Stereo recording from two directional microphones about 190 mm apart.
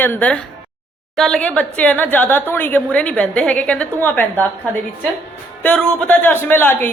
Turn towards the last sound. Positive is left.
turn(degrees=10)  # may be behind; listen again after turning